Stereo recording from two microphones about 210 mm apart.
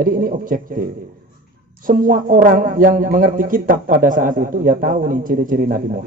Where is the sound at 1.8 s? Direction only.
40° right (ahead or behind).